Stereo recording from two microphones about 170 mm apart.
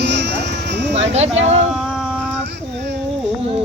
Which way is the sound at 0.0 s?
90° right.